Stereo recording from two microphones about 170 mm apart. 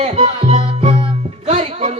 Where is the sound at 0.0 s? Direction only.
35° right (ahead or behind).